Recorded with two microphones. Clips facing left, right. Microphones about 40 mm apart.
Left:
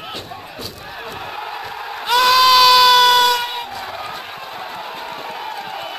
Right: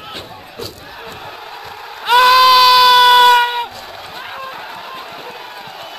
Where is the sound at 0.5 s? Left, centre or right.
Centre.